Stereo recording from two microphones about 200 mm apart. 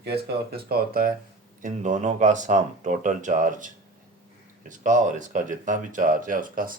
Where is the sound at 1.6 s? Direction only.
35° right (ahead or behind).